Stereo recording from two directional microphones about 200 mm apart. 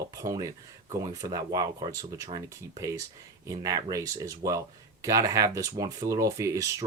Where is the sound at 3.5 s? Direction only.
15° right (ahead or behind).